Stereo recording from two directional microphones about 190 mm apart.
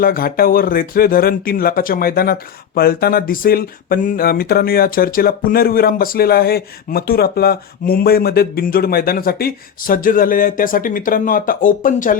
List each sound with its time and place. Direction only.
0.0 s speech: 50° left (ahead or behind)